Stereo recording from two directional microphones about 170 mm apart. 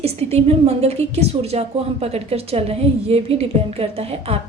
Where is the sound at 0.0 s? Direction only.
35° right (ahead or behind).